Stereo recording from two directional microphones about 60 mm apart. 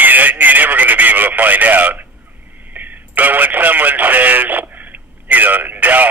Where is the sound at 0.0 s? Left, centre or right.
Right.